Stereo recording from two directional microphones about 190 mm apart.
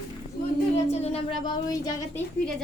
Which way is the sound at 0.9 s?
30° left (ahead or behind).